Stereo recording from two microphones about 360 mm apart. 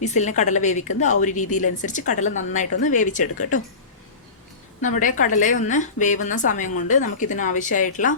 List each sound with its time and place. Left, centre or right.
0.0 s a woman's voice: centre
4.8 s a woman's voice: left